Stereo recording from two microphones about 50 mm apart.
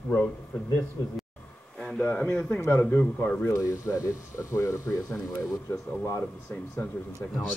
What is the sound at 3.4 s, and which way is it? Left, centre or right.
Speech, left.